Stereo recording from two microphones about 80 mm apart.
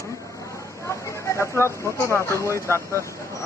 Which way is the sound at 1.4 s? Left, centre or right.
Left.